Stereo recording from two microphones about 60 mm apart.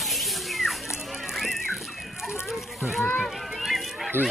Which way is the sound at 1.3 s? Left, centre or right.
Centre.